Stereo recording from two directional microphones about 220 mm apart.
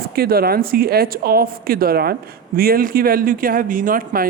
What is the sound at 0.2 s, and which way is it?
A woman's voice, 45° right (ahead or behind).